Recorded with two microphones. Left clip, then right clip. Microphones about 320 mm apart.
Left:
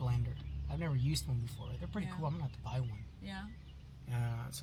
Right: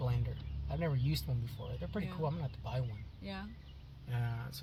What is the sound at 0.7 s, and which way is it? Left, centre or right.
Speech, centre.